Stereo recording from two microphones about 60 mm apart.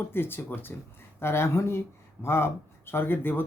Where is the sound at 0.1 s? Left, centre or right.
Left.